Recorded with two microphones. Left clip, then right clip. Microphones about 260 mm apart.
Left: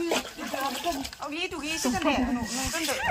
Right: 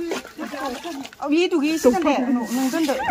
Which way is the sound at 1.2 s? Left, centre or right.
Right.